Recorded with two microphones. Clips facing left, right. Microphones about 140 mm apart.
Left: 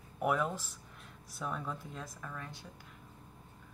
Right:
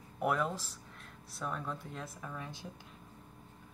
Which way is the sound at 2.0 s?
10° right (ahead or behind).